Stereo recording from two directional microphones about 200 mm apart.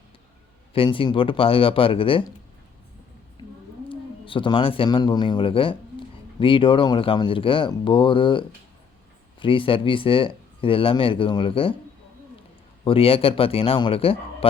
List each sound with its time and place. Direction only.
0.7 s speech: 25° left (ahead or behind)
3.8 s speech: 25° left (ahead or behind)
12.8 s speech: 30° left (ahead or behind)